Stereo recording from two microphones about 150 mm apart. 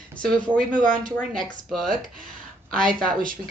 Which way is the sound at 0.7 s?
60° right (ahead or behind).